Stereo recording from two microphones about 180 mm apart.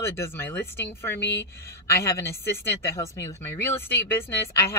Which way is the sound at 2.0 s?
15° left (ahead or behind).